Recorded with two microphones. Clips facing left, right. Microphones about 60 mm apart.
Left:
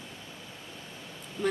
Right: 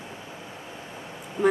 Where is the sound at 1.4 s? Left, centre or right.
Right.